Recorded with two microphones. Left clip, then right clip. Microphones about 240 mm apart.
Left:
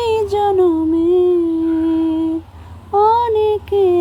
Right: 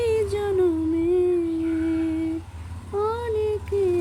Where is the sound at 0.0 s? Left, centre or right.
Left.